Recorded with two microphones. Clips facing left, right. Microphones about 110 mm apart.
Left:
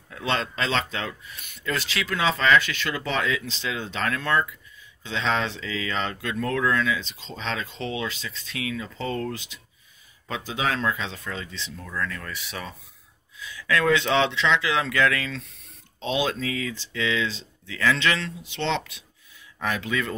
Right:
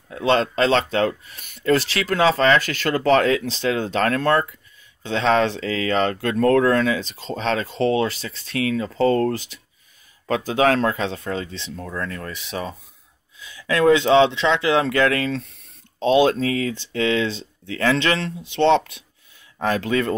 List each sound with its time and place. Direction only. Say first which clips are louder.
0.1 s speech: right 8 dB; 35° right (ahead or behind)
11.9 s speech: right 1 dB; 35° right (ahead or behind)
12.3 s speech: right 6 dB; 25° right (ahead or behind); by 18.8 s 50° right (ahead or behind)
19.8 s speech: right 7 dB; 45° right (ahead or behind)